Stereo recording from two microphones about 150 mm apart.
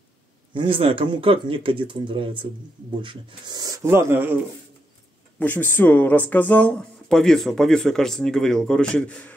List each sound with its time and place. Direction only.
0.6 s speech: 35° right (ahead or behind); by 4.4 s 15° right (ahead or behind)
5.4 s speech: 15° left (ahead or behind)